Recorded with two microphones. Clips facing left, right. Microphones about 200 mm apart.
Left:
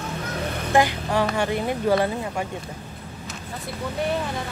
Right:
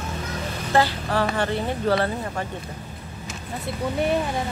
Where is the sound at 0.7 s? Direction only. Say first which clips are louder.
Left 1 dB; 15° left (ahead or behind).